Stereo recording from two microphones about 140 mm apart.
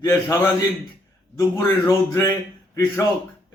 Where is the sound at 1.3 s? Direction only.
20° left (ahead or behind).